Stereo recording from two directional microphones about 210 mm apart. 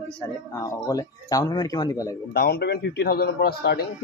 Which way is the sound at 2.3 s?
50° left (ahead or behind).